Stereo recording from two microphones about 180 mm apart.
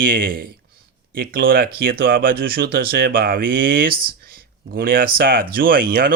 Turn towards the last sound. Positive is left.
turn(degrees=-55)  # may be behind; listen again after turning